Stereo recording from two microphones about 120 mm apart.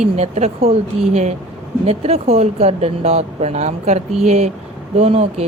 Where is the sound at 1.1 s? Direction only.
70° right (ahead or behind).